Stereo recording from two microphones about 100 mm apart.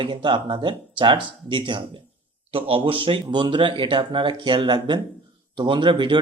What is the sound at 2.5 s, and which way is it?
Speech, 65° right (ahead or behind).